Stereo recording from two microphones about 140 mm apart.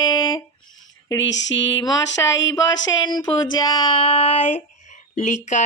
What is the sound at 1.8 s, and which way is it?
Speech, 25° left (ahead or behind).